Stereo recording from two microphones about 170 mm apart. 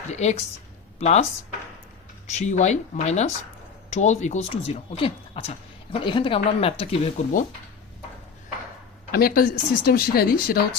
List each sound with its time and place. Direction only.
0.1 s a woman's voice: 40° left (ahead or behind)
2.3 s speech: 45° left (ahead or behind)
9.1 s speech: 60° left (ahead or behind)